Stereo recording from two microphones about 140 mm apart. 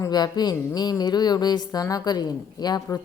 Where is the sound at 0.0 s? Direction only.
30° left (ahead or behind).